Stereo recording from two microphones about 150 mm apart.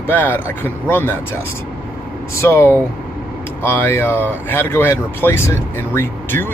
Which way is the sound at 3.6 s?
15° left (ahead or behind).